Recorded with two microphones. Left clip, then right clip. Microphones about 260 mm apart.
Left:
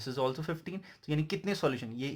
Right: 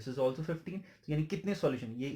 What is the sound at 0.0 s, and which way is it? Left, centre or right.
Speech, left.